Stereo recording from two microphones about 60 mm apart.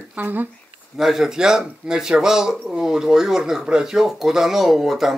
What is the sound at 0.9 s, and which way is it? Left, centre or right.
Speech, centre.